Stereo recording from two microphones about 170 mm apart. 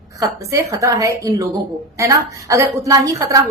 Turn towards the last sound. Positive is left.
turn(degrees=-20)  # may be behind; listen again after turning